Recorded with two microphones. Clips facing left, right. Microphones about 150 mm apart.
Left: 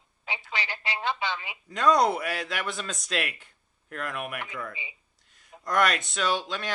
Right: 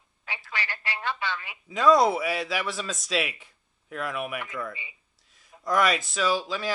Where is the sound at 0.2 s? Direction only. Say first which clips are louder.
Left 1 dB; 20° left (ahead or behind).